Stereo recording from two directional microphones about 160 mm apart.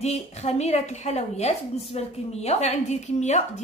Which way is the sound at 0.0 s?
40° left (ahead or behind).